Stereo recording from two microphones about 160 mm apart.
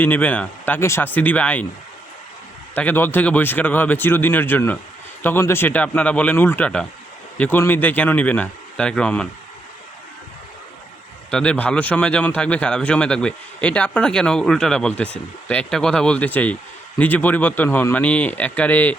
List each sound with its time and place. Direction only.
0.0 s a man's voice: 10° left (ahead or behind)
2.7 s a man's voice: 10° left (ahead or behind)
11.3 s a man's voice: 5° left (ahead or behind)